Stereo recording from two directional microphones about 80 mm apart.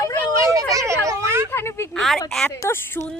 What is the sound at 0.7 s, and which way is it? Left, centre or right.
Speech, right.